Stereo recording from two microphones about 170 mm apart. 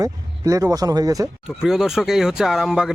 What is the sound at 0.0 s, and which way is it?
Speech, 20° right (ahead or behind).